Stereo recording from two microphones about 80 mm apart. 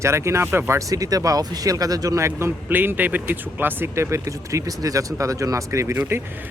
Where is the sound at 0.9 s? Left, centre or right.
Right.